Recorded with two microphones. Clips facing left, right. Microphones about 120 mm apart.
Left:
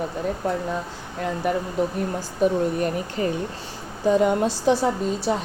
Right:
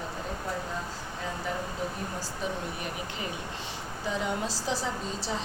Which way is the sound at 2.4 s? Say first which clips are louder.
Left 15 dB; 55° left (ahead or behind).